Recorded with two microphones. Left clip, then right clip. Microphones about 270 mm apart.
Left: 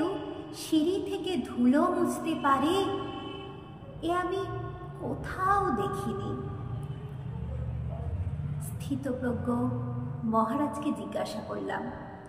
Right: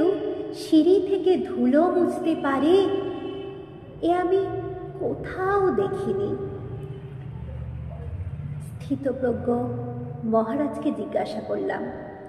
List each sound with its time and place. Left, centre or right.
0.0 s a woman's voice: centre
4.0 s a woman's voice: centre
8.8 s a woman's voice: centre